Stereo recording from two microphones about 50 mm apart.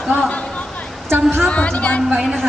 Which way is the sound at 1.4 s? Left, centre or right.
Left.